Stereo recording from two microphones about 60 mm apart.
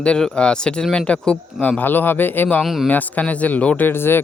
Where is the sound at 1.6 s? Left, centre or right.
Left.